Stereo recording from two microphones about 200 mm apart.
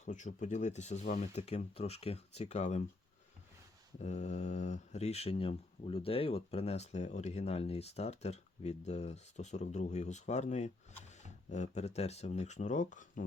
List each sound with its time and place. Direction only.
0.0 s speech: 35° left (ahead or behind)
4.0 s speech: 35° left (ahead or behind)